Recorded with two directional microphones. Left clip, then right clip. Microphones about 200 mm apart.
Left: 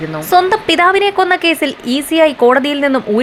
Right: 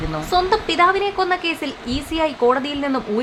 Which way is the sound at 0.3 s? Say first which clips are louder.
Left 8 dB; 30° left (ahead or behind).